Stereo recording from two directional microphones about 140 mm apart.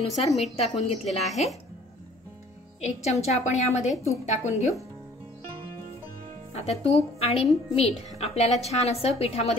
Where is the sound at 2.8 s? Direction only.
50° left (ahead or behind).